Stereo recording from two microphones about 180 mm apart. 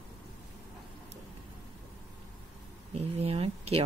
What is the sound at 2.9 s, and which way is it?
Speech, 35° right (ahead or behind).